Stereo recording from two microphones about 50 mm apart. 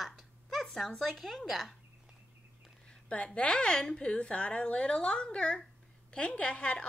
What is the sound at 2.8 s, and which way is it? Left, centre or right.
A woman's voice, left.